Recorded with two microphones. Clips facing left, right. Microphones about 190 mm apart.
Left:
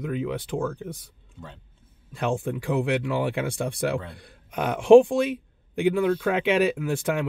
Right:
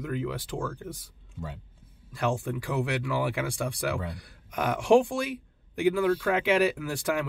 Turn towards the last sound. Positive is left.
turn(degrees=20)  # may be behind; listen again after turning